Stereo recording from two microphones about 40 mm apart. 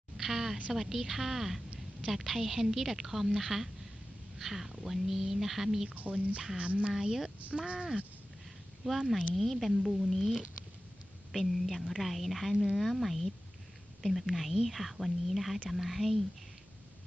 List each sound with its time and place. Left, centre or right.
0.2 s a woman's voice: centre
5.9 s speech: right
6.9 s speech: centre
8.8 s speech: centre